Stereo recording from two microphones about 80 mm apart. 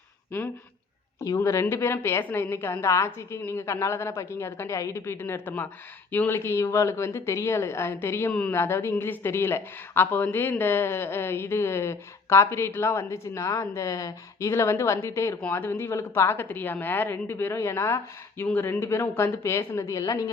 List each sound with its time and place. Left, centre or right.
0.3 s speech: left
1.4 s speech: left
8.3 s a woman's voice: centre
8.5 s speech: left